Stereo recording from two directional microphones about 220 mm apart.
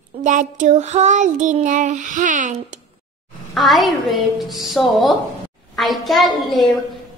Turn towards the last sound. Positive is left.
turn(degrees=0)  # may be behind; listen again after turning